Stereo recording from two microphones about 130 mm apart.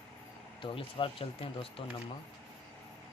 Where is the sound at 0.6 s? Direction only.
45° left (ahead or behind).